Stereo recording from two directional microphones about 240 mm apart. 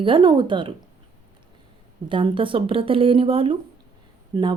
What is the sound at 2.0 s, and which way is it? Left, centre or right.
A woman's voice, right.